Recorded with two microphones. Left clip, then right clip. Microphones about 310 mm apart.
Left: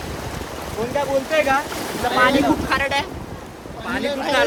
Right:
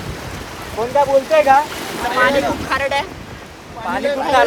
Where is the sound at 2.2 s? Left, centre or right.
Centre.